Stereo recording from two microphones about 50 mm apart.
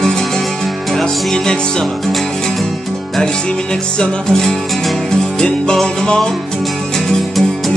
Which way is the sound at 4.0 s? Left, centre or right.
Centre.